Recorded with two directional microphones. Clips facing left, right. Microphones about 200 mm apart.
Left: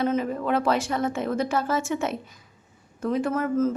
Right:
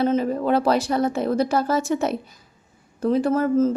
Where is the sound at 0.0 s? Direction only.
35° right (ahead or behind).